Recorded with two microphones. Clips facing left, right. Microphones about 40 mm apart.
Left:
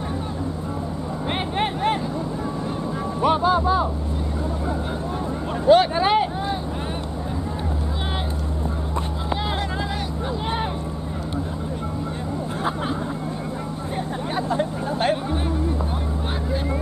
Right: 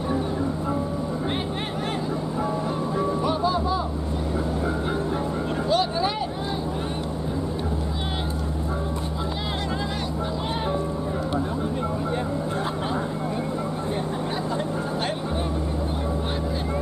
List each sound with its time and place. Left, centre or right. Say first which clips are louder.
3.2 s music: left 4 dB; left
5.7 s vehicle: left 9 dB; left